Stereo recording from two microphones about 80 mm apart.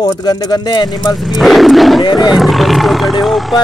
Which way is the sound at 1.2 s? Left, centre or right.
Centre.